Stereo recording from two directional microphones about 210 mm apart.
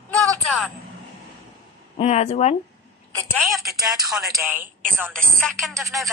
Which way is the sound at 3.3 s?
Centre (ahead or behind).